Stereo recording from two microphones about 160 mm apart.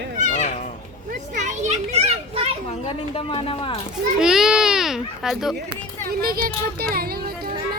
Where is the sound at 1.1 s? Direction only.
50° right (ahead or behind).